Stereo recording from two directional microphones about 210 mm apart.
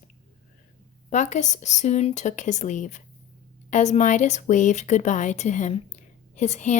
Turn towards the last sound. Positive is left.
turn(degrees=35)  # may be behind; listen again after turning